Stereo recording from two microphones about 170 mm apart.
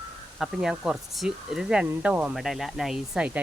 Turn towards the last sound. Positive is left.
turn(degrees=-5)  # may be behind; listen again after turning